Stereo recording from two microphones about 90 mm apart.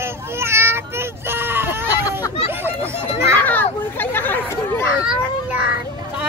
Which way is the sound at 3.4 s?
20° left (ahead or behind).